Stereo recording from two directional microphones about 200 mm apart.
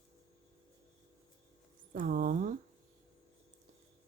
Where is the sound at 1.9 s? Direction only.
45° right (ahead or behind).